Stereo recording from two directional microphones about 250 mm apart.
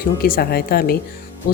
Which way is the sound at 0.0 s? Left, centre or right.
Left.